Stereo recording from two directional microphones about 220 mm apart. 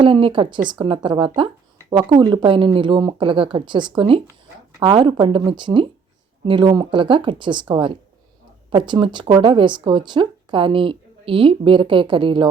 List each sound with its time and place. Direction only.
0.0 s a woman's voice: 25° right (ahead or behind)